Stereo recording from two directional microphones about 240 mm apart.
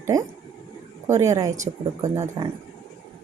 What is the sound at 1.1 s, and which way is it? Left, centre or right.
A woman's voice, centre.